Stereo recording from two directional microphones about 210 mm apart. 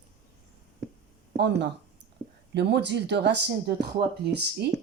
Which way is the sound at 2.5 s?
55° right (ahead or behind).